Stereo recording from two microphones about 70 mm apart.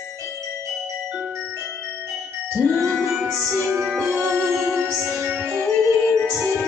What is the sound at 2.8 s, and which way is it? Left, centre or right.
Music, centre.